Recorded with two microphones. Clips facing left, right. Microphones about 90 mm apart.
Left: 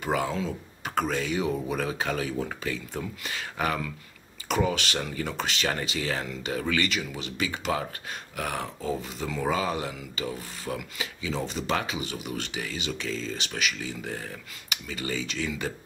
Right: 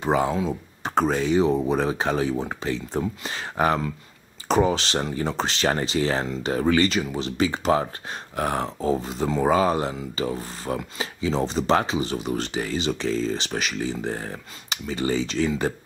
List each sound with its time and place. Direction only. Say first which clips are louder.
0.0 s speech: right 5 dB; 25° right (ahead or behind)